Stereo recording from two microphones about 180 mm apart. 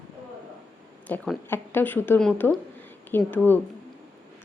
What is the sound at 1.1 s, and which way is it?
A woman's voice, 10° left (ahead or behind).